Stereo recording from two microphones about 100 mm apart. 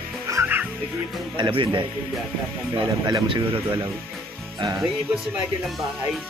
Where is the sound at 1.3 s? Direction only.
50° right (ahead or behind).